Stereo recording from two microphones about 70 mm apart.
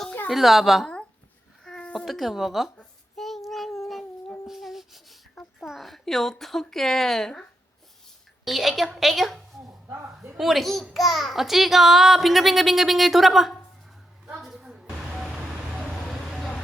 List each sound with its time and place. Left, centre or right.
0.3 s a child's voice: centre
1.6 s a sound: centre
2.0 s a child's voice: centre
3.2 s child singing: centre
4.4 s a sound: centre
5.6 s a woman's voice: centre
8.4 s a child's voice: centre
14.3 s a sound: centre
16.0 s vehicle: centre